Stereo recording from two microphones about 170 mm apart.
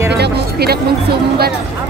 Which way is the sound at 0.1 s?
70° right (ahead or behind).